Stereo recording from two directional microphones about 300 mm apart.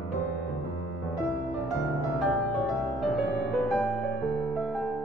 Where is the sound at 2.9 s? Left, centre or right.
Centre.